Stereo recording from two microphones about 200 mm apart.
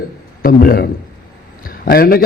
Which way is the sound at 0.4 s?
45° left (ahead or behind).